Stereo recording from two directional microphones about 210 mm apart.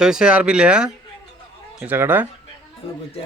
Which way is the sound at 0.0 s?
5° right (ahead or behind).